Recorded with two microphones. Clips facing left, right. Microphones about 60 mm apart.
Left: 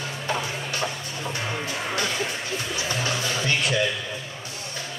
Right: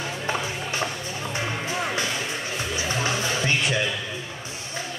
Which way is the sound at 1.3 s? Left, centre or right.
Right.